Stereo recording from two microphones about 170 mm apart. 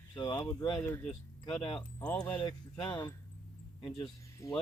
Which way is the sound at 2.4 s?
25° left (ahead or behind).